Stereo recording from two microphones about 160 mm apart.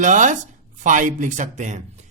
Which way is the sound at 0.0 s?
50° right (ahead or behind).